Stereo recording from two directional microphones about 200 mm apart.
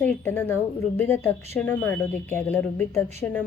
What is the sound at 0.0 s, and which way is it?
A woman's voice, 10° left (ahead or behind).